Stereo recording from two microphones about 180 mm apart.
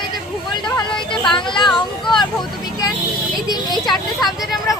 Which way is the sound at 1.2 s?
25° left (ahead or behind).